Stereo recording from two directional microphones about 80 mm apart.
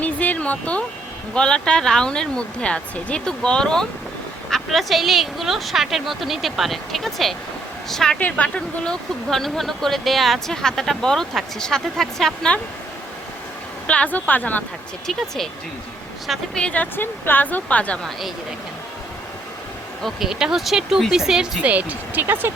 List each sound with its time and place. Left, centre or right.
0.0 s a sound: centre
1.3 s speech: centre
13.8 s speech: centre
15.0 s speech: centre
16.6 s speech: centre
20.0 s speech: centre
21.6 s speech: centre